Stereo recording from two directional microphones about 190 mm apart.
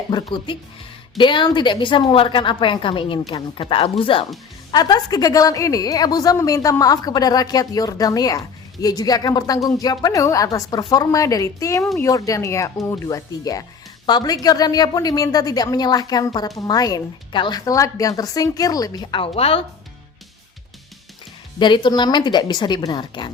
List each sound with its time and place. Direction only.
0.1 s a woman's voice: 25° left (ahead or behind)
21.6 s a woman's voice: 25° left (ahead or behind)